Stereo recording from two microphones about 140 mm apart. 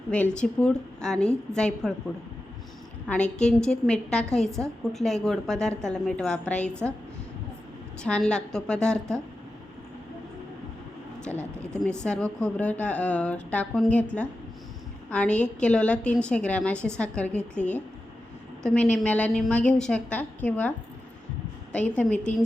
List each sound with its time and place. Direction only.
0.3 s a woman's voice: 5° left (ahead or behind)
3.3 s a woman's voice: 5° left (ahead or behind)
8.0 s a woman's voice: 5° left (ahead or behind)
11.3 s speech: 20° right (ahead or behind)
11.8 s a woman's voice: 5° left (ahead or behind)